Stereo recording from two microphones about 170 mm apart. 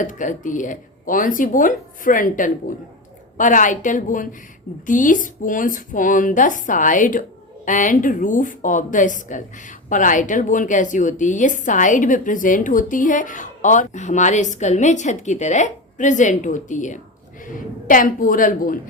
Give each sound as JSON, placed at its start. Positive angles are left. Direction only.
{"t": 0.0, "sound": "speech", "side_deg": 50}